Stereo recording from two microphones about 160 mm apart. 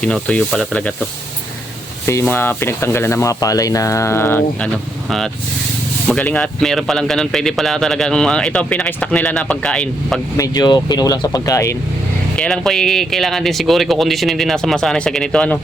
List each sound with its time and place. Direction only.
0.0 s speech: 5° left (ahead or behind)
2.0 s speech: 15° left (ahead or behind)
5.0 s a man's voice: centre (ahead or behind)
10.3 s speech: 25° left (ahead or behind)
12.4 s a man's voice: 5° left (ahead or behind)